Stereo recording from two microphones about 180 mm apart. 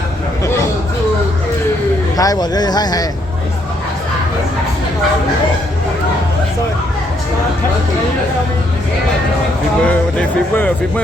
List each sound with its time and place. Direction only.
2.1 s speech: 20° left (ahead or behind)
9.8 s speech: 5° left (ahead or behind)